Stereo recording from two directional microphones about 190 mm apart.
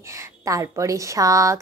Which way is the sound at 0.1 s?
15° right (ahead or behind).